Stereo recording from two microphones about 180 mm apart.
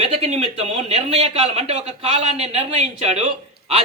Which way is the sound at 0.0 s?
35° right (ahead or behind).